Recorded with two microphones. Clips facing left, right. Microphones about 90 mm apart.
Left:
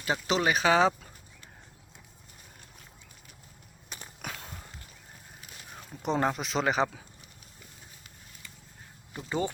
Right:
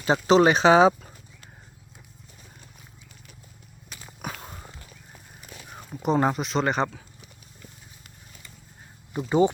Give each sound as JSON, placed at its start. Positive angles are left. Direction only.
{"t": 0.0, "sound": "speech", "side_deg": -30}
{"t": 4.2, "sound": "biting", "side_deg": -5}
{"t": 5.7, "sound": "speech", "side_deg": -5}
{"t": 9.1, "sound": "speech", "side_deg": -20}